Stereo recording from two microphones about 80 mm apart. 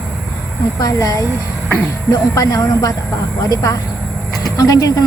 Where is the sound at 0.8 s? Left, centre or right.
Left.